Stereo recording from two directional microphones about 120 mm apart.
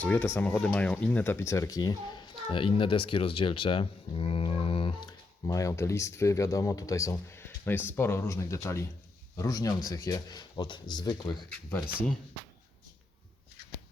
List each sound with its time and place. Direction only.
0.0 s a child's voice: 15° left (ahead or behind); by 5.1 s 45° left (ahead or behind)
5.5 s a man's voice: 25° left (ahead or behind)
10.5 s speech: 40° left (ahead or behind)